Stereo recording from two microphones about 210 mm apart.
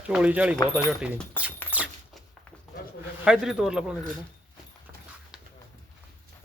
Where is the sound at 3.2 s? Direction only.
5° right (ahead or behind).